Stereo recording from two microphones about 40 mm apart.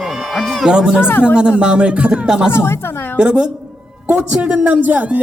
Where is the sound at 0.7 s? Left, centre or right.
Centre.